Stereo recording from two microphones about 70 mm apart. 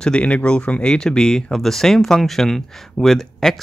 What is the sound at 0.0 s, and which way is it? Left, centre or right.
Speech, centre.